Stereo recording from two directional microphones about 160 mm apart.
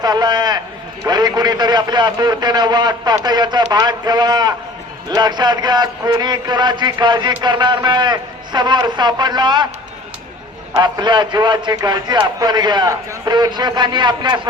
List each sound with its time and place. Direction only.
0.0 s a man's voice: 25° right (ahead or behind)
10.8 s a man's voice: 25° right (ahead or behind)